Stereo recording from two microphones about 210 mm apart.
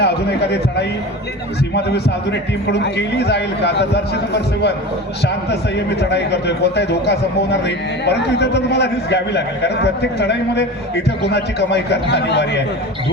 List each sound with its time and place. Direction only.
0.0 s a man's voice: 50° left (ahead or behind)